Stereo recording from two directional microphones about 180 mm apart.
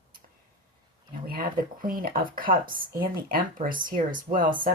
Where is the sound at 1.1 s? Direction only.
55° right (ahead or behind).